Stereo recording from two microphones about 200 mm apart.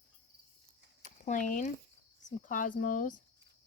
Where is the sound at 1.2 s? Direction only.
40° left (ahead or behind).